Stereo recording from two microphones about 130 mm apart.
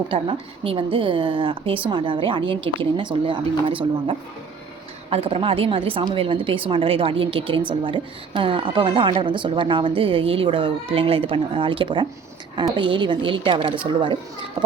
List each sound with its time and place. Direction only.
0.1 s a woman's voice: 45° right (ahead or behind)
5.1 s a woman's voice: 50° right (ahead or behind)